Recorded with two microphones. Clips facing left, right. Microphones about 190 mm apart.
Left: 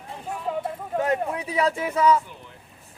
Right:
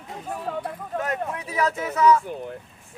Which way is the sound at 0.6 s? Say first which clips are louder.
Left 3 dB; 25° left (ahead or behind).